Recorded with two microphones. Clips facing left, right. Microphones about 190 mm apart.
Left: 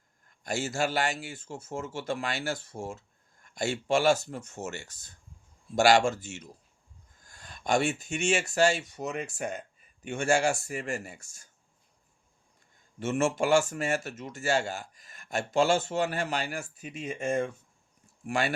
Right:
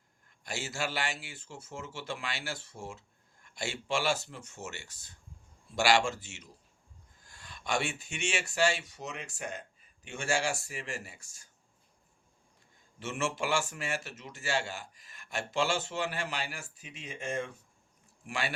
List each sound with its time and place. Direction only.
0.4 s speech: 45° left (ahead or behind)
13.0 s speech: 45° left (ahead or behind)